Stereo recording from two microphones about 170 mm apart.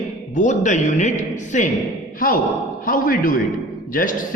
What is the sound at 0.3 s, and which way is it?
A man's voice, 45° left (ahead or behind).